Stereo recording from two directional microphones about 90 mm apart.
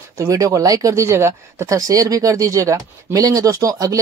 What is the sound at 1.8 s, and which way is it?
Speech, 40° right (ahead or behind).